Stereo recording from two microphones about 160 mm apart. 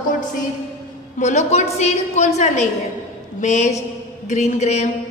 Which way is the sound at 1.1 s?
45° left (ahead or behind).